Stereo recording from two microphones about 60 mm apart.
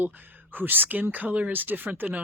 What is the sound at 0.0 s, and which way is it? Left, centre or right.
Speech, right.